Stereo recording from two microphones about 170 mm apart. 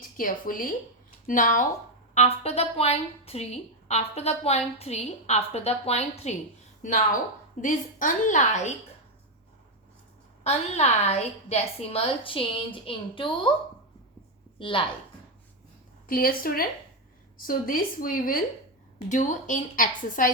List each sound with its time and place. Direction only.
0.2 s a woman's voice: 55° left (ahead or behind)
2.1 s a woman's voice: 40° left (ahead or behind)
7.5 s a woman's voice: 50° left (ahead or behind)
10.4 s a woman's voice: 40° left (ahead or behind)
14.6 s a woman's voice: 30° left (ahead or behind)
16.0 s a woman's voice: 55° left (ahead or behind)
18.9 s a woman's voice: 45° left (ahead or behind)